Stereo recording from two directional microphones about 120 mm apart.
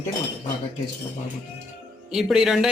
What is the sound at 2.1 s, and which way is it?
Speech, 5° right (ahead or behind).